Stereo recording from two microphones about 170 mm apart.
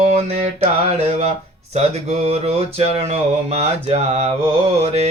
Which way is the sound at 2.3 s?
40° right (ahead or behind).